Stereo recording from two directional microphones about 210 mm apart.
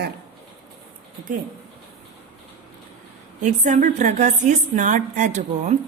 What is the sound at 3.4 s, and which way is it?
A woman's voice, 35° right (ahead or behind).